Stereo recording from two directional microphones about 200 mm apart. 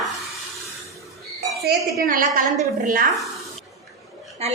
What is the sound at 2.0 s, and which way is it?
A woman's voice, 45° right (ahead or behind).